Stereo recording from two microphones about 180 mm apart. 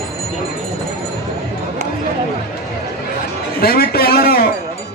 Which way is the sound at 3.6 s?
55° left (ahead or behind).